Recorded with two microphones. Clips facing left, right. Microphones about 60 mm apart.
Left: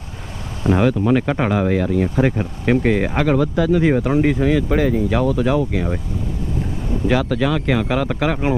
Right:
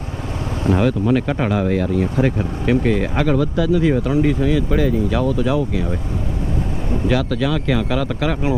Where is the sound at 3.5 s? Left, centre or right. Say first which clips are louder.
Left 1 dB; left.